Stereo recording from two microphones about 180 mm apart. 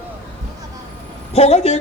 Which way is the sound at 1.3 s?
35° left (ahead or behind).